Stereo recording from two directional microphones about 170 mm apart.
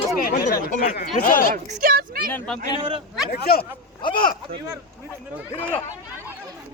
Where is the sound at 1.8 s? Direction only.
60° right (ahead or behind).